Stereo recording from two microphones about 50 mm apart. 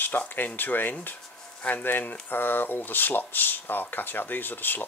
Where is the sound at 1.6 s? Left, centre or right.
Left.